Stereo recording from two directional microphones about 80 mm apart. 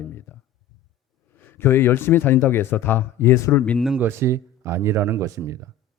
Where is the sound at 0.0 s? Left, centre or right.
Left.